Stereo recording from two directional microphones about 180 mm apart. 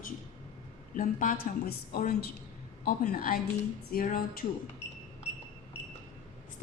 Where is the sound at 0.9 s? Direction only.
50° left (ahead or behind).